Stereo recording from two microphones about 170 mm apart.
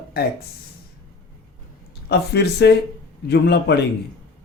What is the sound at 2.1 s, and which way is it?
A man's voice, 80° left.